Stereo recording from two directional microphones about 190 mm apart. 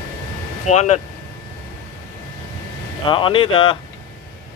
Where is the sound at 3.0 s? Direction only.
25° left (ahead or behind).